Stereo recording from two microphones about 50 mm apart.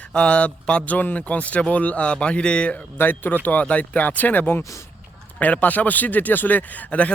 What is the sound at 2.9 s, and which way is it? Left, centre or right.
Speech, left.